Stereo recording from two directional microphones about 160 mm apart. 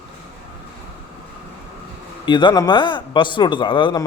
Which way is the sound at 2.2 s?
30° left (ahead or behind).